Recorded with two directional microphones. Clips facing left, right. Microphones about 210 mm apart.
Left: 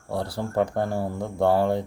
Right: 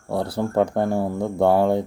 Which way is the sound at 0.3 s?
20° right (ahead or behind).